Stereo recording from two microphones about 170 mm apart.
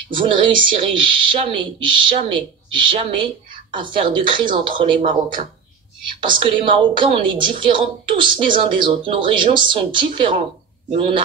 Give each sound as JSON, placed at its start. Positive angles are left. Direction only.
{"t": 0.1, "sound": "a woman's voice", "side_deg": -30}